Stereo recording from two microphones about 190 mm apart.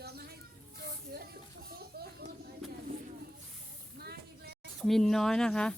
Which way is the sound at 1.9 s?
55° right (ahead or behind).